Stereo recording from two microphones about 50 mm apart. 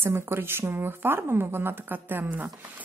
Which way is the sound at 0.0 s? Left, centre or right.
Right.